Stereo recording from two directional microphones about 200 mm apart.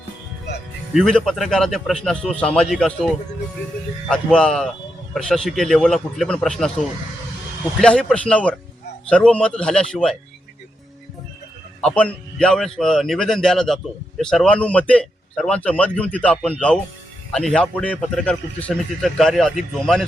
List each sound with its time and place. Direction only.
0.9 s a man's voice: centre (ahead or behind)
4.1 s a man's voice: 5° left (ahead or behind)
11.8 s a man's voice: 5° left (ahead or behind)